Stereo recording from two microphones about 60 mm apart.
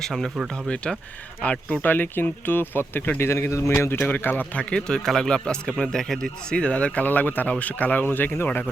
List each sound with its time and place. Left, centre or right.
0.0 s speech: centre
1.4 s speech: left
3.2 s a man's voice: left
4.0 s speech: left
5.0 s speech: centre
6.6 s speech: centre